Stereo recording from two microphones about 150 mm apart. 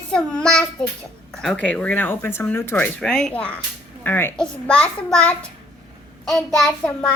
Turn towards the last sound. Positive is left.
turn(degrees=5)  # may be behind; listen again after turning